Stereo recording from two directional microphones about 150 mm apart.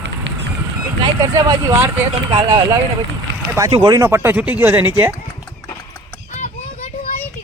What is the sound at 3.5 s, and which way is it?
Speech, 25° right (ahead or behind).